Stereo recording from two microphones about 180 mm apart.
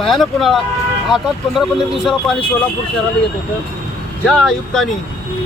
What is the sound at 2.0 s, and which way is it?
Speech, 5° left (ahead or behind).